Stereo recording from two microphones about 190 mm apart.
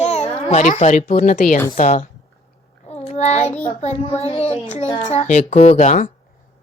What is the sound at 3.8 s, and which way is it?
A child's voice, 35° left (ahead or behind).